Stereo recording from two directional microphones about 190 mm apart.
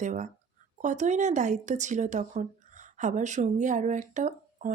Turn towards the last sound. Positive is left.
turn(degrees=-40)  # may be behind; listen again after turning